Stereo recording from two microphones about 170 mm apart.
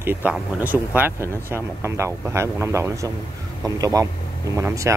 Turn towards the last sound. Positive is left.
turn(degrees=-20)  # may be behind; listen again after turning